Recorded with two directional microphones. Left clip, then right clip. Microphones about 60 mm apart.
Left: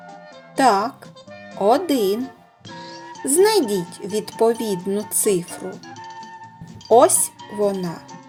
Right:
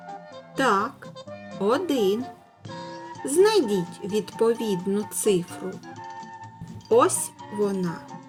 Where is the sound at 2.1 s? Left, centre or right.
Right.